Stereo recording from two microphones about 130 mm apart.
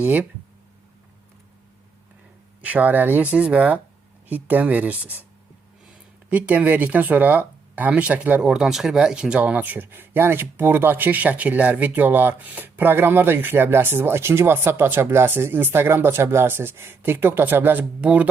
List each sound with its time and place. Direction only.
0.0 s speech: 10° right (ahead or behind)
2.6 s speech: 10° right (ahead or behind)
6.3 s speech: 10° right (ahead or behind)